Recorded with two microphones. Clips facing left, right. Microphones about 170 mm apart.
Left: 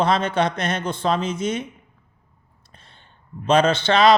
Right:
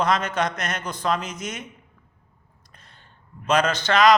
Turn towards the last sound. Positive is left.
turn(degrees=30)  # may be behind; listen again after turning